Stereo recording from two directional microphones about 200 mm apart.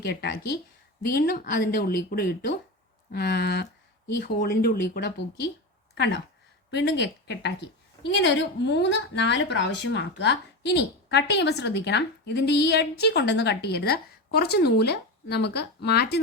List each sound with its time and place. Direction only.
0.0 s a woman's voice: 55° left (ahead or behind)